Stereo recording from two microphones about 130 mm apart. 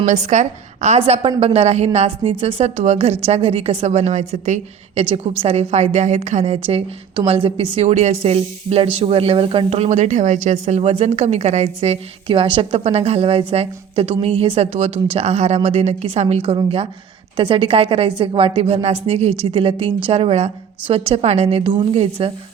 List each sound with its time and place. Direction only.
0.0 s a woman's voice: 70° right (ahead or behind)
5.0 s a woman's voice: 50° right (ahead or behind)
12.8 s speech: 55° right (ahead or behind)